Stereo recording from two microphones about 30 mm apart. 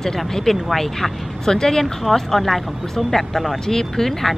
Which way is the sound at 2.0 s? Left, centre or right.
Centre.